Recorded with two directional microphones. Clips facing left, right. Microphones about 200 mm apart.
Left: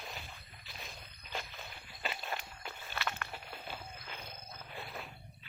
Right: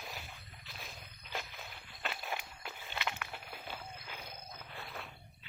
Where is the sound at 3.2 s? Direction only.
5° right (ahead or behind).